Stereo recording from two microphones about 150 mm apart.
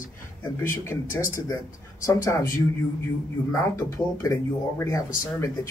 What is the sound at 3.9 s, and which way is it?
Speech, 20° left (ahead or behind).